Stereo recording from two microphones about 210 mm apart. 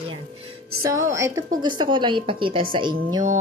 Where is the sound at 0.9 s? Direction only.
15° right (ahead or behind).